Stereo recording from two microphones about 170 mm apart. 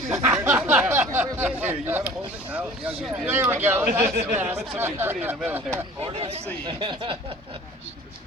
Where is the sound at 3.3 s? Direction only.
15° right (ahead or behind).